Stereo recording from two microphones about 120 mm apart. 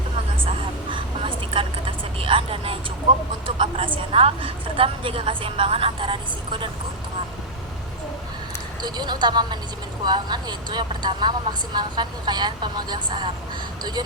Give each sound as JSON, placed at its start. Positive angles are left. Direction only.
{"t": 0.4, "sound": "vehicle", "side_deg": -45}
{"t": 2.1, "sound": "a woman's voice", "side_deg": -50}
{"t": 8.8, "sound": "speech", "side_deg": -35}